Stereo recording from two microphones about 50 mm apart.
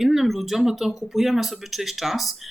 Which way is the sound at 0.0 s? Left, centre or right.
Centre.